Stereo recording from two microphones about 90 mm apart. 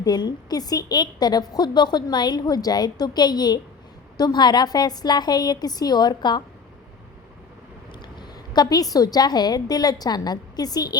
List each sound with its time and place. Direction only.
0.0 s a woman's voice: 50° left (ahead or behind)
8.5 s a woman's voice: 45° left (ahead or behind)